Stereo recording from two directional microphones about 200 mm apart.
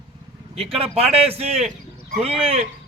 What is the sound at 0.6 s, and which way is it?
A man's voice, 30° right (ahead or behind).